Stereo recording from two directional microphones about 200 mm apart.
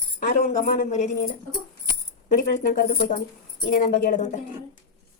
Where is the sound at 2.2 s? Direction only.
40° left (ahead or behind).